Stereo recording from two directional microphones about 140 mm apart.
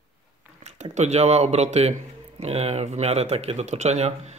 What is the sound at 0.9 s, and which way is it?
Speech, 55° right (ahead or behind).